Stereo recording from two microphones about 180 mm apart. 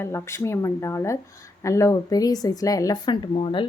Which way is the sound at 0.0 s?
15° left (ahead or behind).